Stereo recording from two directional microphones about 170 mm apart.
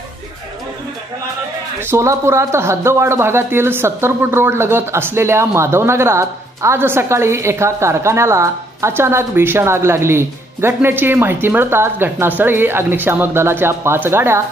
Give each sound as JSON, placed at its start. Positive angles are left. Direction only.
{"t": 1.8, "sound": "speech", "side_deg": -15}